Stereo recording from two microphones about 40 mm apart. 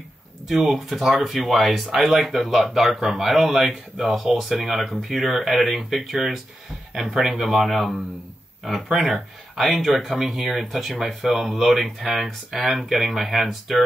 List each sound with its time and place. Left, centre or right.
0.5 s speech: centre
7.2 s speech: centre
9.6 s speech: centre